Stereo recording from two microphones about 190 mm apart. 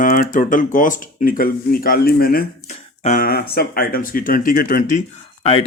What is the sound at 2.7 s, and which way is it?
Speech, 40° left (ahead or behind).